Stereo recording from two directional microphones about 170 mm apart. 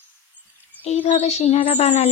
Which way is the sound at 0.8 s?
40° left (ahead or behind).